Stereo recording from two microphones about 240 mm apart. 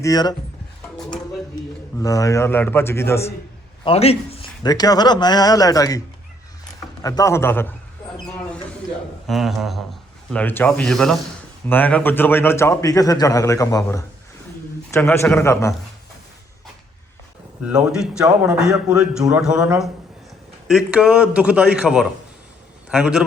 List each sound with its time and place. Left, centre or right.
0.0 s speech: centre
2.0 s speech: centre
3.8 s speech: left
7.0 s speech: centre
9.2 s speech: centre
17.6 s a man's voice: centre